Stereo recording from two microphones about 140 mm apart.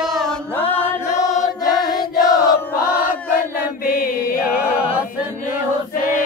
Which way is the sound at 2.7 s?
85° left.